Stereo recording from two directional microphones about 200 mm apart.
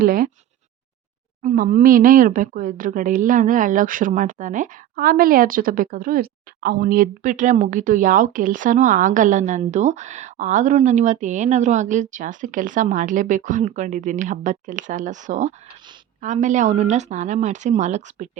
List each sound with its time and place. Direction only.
0.0 s speech: 45° right (ahead or behind)
1.4 s speech: 40° right (ahead or behind)